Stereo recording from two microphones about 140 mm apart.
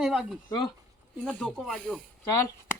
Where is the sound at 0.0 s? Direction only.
5° right (ahead or behind).